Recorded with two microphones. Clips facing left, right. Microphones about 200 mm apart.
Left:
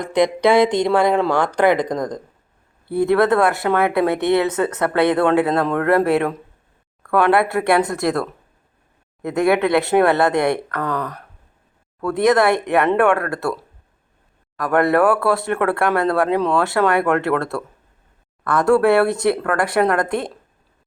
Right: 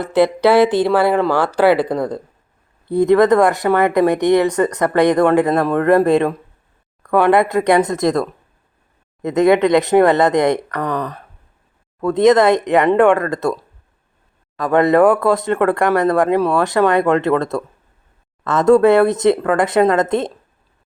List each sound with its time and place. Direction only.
0.0 s speech: 5° right (ahead or behind); by 20.3 s 20° right (ahead or behind)